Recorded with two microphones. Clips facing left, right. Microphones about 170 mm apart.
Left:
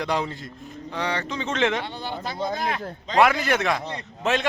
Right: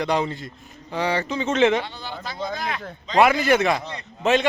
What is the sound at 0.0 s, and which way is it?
Speech, centre (ahead or behind).